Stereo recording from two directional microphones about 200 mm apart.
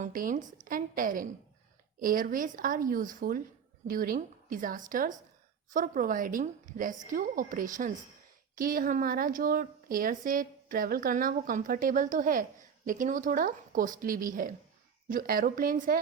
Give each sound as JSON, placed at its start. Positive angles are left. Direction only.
{"t": 0.0, "sound": "a woman's voice", "side_deg": -45}